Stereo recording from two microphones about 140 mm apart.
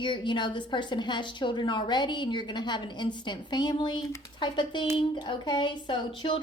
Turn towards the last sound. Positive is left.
turn(degrees=35)  # may be behind; listen again after turning